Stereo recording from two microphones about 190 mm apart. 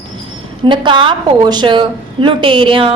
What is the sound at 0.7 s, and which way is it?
A woman's voice, 25° right (ahead or behind).